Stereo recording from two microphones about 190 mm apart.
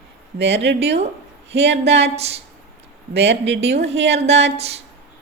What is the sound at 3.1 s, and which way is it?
Speech, 65° right (ahead or behind).